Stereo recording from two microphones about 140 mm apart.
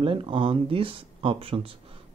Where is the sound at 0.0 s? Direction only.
40° right (ahead or behind).